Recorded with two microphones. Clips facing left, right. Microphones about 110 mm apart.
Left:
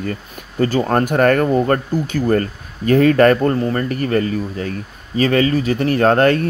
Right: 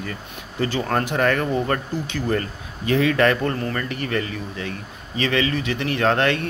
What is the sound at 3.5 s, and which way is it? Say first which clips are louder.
Speech: left 7 dB; 35° left (ahead or behind).